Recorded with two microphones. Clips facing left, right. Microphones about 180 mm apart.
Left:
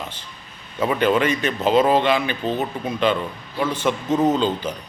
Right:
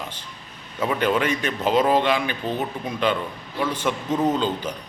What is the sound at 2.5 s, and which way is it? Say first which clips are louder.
Speech: left 3 dB; 10° left (ahead or behind).